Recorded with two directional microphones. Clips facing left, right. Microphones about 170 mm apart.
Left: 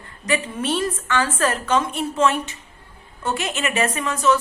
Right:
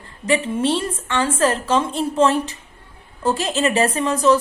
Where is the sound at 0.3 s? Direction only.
25° right (ahead or behind).